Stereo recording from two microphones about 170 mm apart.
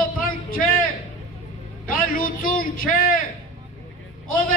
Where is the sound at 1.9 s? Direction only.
55° left (ahead or behind).